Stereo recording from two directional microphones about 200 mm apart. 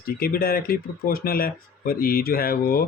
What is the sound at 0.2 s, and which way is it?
Speech, 50° left (ahead or behind).